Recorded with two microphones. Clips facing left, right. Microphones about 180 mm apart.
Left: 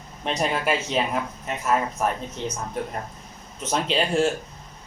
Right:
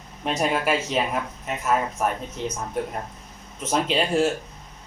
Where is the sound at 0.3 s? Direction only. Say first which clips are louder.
Right 1 dB; 5° right (ahead or behind).